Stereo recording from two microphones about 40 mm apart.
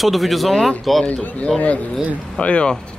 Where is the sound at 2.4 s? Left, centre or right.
Left.